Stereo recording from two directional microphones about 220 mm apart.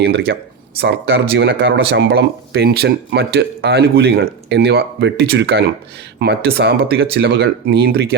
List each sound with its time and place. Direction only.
0.0 s speech: 50° right (ahead or behind)